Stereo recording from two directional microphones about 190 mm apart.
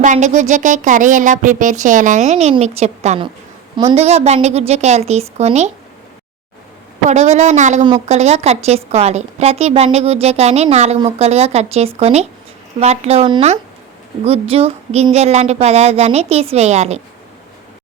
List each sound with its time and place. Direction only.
0.0 s a woman's voice: 40° right (ahead or behind)
7.1 s a woman's voice: 35° right (ahead or behind)